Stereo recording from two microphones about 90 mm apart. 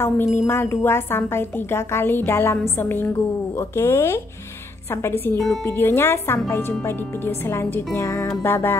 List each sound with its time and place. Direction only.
0.0 s a woman's voice: 30° left (ahead or behind)
7.4 s a woman's voice: 30° left (ahead or behind)